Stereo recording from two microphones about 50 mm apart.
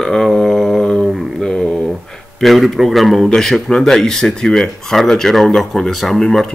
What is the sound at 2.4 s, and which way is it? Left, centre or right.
Speech, centre.